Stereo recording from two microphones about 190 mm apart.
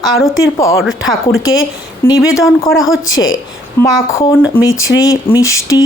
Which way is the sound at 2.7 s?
90° left.